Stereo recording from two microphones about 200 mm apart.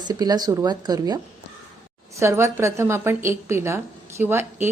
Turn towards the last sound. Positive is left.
turn(degrees=-10)  # may be behind; listen again after turning